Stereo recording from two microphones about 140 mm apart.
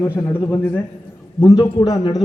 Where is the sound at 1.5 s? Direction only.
35° left (ahead or behind).